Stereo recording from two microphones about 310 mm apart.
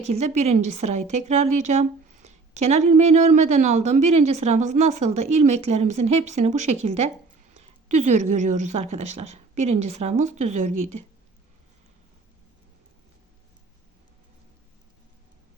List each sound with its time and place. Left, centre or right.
0.1 s a woman's voice: right
7.5 s a sound: right
8.3 s a woman's voice: right
8.9 s speech: right
9.6 s a woman's voice: right